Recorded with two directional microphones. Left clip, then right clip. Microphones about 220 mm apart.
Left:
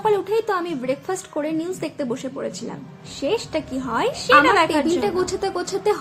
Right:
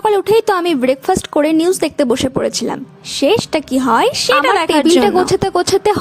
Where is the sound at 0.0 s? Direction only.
50° right (ahead or behind).